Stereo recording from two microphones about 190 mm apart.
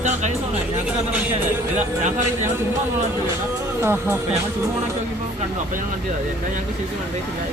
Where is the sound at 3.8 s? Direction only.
10° right (ahead or behind).